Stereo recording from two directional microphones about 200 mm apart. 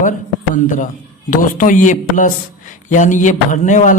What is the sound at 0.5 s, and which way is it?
A man's voice, 40° left (ahead or behind).